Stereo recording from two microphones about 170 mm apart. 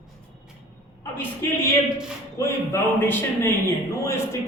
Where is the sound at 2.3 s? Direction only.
15° left (ahead or behind).